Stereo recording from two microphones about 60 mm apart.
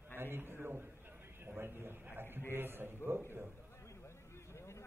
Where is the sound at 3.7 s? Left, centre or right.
Left.